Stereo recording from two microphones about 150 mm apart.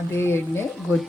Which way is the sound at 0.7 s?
Centre (ahead or behind).